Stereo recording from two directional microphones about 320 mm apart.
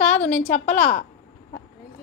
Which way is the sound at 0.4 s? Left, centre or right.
Left.